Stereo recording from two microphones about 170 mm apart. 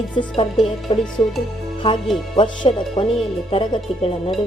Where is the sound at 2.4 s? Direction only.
30° left (ahead or behind).